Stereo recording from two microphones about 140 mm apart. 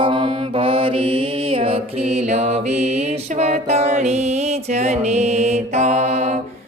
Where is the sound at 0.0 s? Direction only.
35° right (ahead or behind); by 6.4 s 55° right (ahead or behind).